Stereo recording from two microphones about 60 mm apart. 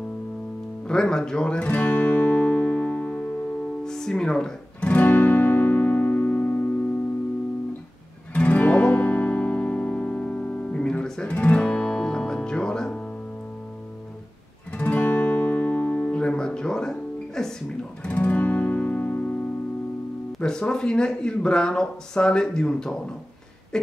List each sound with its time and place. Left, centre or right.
0.8 s speech: centre
1.7 s music: left
3.8 s speech: centre
4.8 s music: left
8.3 s music: left
14.8 s guitar: left; by 17.5 s centre
18.0 s music: left
20.3 s speech: centre